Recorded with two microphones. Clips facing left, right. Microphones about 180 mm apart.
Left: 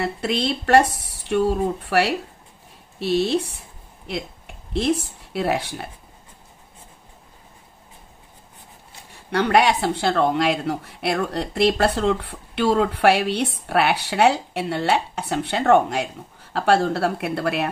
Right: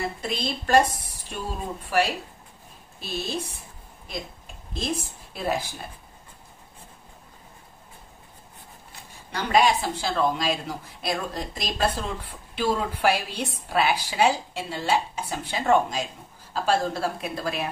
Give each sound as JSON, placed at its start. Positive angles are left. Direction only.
{"t": 0.0, "sound": "speech", "side_deg": 70}
{"t": 9.3, "sound": "speech", "side_deg": 65}